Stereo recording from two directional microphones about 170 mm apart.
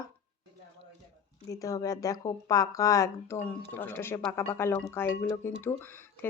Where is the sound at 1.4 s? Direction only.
20° left (ahead or behind).